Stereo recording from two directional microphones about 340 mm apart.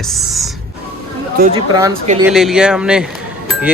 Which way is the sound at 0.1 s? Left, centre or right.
Centre.